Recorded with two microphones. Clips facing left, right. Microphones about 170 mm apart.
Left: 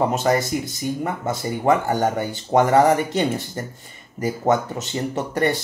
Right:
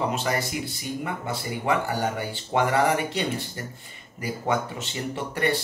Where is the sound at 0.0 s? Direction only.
45° left (ahead or behind).